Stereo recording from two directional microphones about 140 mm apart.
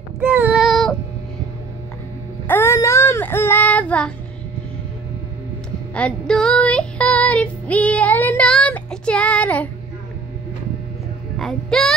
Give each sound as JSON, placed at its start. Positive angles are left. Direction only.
{"t": 0.2, "sound": "child singing", "side_deg": -15}
{"t": 2.4, "sound": "child singing", "side_deg": 15}
{"t": 5.9, "sound": "child singing", "side_deg": 5}
{"t": 11.3, "sound": "music", "side_deg": 0}